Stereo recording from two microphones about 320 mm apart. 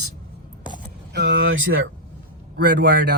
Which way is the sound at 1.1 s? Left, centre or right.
Right.